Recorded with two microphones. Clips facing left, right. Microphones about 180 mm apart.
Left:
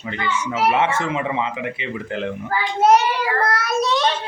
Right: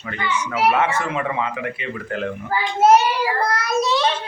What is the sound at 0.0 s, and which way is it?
Speech, 20° left (ahead or behind).